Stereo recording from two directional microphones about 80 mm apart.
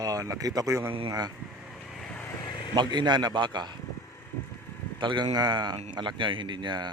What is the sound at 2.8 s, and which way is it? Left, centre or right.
A man's voice, right.